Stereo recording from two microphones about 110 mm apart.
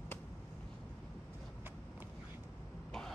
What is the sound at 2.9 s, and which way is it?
Throat clearing, 5° left (ahead or behind).